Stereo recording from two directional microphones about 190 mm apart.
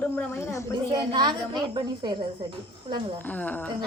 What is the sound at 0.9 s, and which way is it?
Speech, 20° right (ahead or behind).